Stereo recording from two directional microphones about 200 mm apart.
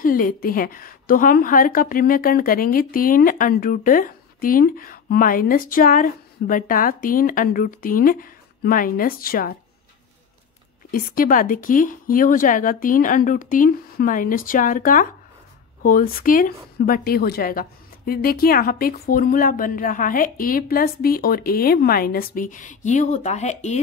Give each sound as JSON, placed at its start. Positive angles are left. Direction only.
{"t": 0.0, "sound": "a woman's voice", "side_deg": 45}
{"t": 10.9, "sound": "a woman's voice", "side_deg": 45}